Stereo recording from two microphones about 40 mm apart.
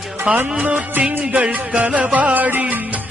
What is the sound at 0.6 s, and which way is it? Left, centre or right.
Music, right.